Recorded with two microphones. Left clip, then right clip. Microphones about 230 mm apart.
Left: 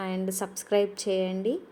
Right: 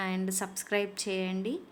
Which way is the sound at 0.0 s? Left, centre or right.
Centre.